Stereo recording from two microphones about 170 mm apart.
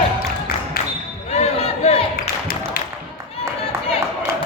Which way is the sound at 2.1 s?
60° left (ahead or behind).